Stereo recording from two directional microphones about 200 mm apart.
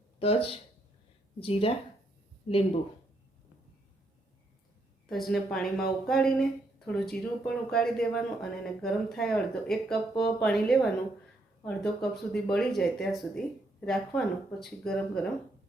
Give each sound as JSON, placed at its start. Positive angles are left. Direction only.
{"t": 0.2, "sound": "speech", "side_deg": 30}
{"t": 5.0, "sound": "speech", "side_deg": 0}